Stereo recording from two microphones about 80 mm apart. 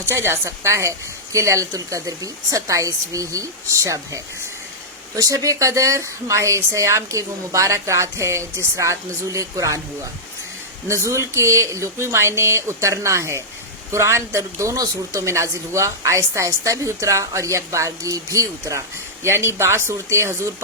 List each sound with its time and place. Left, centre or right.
0.0 s speech: right
10.8 s speech: right